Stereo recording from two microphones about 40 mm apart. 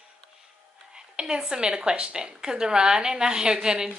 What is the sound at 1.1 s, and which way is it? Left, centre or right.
A woman's voice, right.